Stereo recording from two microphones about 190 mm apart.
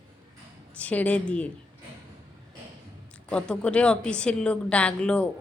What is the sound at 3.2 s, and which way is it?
Speech, 5° left (ahead or behind).